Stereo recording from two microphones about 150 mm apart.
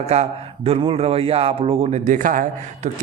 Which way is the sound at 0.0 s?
45° right (ahead or behind).